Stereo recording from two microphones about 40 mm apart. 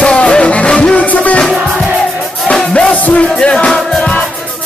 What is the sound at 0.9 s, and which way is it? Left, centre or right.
Music, left.